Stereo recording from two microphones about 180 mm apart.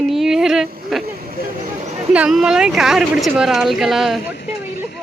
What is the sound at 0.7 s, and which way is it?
Speech, 55° right (ahead or behind).